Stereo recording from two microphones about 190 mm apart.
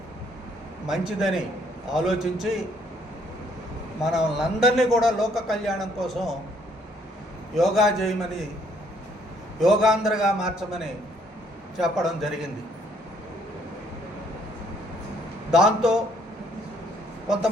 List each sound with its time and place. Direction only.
0.9 s a man's voice: 5° right (ahead or behind)
4.0 s a man's voice: centre (ahead or behind)
7.5 s a man's voice: centre (ahead or behind)
9.6 s a man's voice: centre (ahead or behind)
15.4 s a man's voice: 5° right (ahead or behind)